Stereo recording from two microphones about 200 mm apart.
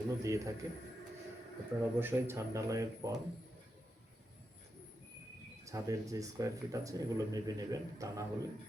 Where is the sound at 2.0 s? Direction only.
10° right (ahead or behind).